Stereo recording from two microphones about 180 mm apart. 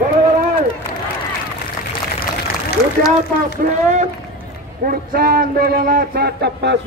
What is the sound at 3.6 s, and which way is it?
Speech, 40° right (ahead or behind).